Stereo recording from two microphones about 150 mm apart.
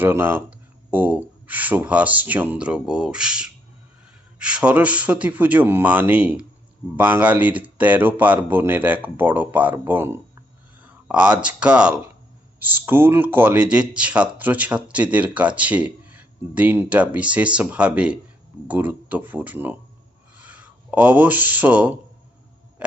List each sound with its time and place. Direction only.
0.0 s speech: 15° right (ahead or behind)